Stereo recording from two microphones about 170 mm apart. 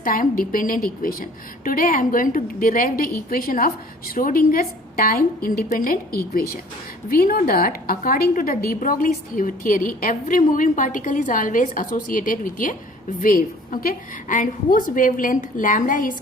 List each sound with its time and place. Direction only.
0.0 s a woman's voice: 55° left (ahead or behind)